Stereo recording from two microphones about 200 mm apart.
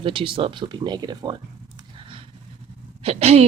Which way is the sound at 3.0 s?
30° right (ahead or behind).